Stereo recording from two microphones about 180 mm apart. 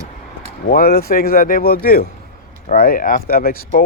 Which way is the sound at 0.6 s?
55° left (ahead or behind).